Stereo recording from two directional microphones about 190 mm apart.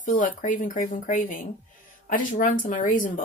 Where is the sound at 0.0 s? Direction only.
40° left (ahead or behind).